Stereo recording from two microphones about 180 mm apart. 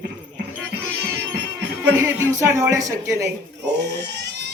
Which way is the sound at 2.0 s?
15° right (ahead or behind).